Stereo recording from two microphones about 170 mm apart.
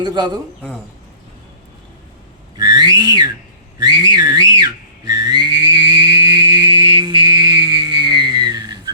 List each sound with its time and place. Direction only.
0.0 s a man's voice: 25° right (ahead or behind)
2.6 s a sound: 25° right (ahead or behind)
3.8 s whistling: 25° right (ahead or behind)